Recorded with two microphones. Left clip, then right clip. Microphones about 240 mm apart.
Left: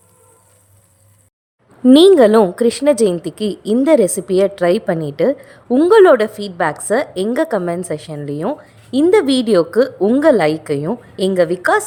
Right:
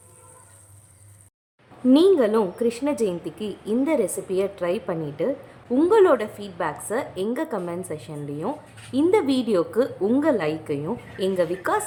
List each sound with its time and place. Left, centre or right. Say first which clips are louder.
1.9 s a woman's voice: left 10 dB; left